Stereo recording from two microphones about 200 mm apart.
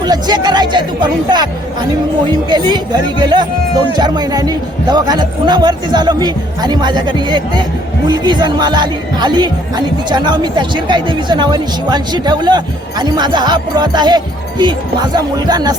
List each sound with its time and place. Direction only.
0.0 s speech: 20° right (ahead or behind)